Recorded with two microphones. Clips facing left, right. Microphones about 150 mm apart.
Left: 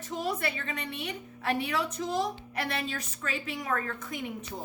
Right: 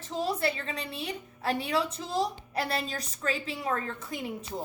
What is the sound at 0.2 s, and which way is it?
A woman's voice, 30° right (ahead or behind).